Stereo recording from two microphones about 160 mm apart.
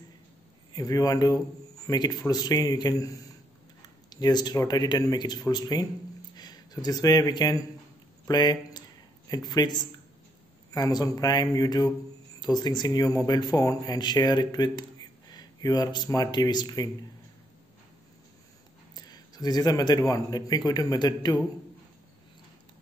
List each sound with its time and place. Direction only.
0.7 s speech: 20° left (ahead or behind)
19.0 s speech: 25° left (ahead or behind)